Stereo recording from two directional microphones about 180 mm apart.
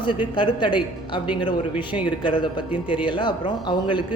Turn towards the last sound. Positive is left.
turn(degrees=25)  # may be behind; listen again after turning